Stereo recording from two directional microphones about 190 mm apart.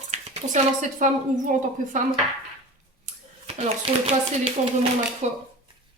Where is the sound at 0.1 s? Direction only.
35° right (ahead or behind).